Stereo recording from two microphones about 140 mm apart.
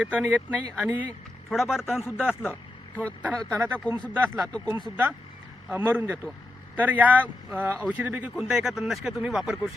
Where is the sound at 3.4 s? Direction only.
20° right (ahead or behind).